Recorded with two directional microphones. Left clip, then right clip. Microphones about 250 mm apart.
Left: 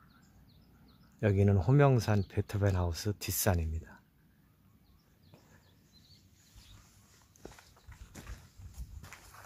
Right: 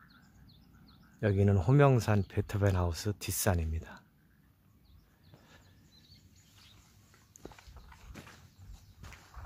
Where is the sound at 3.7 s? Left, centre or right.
Centre.